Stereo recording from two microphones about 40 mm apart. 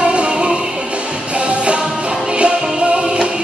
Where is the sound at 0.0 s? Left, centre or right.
Right.